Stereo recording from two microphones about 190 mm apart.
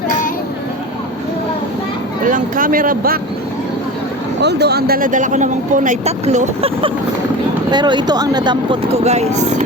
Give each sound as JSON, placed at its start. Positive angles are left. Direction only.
{"t": 2.2, "sound": "speech", "side_deg": -45}
{"t": 4.4, "sound": "speech", "side_deg": -60}
{"t": 7.7, "sound": "speech", "side_deg": -25}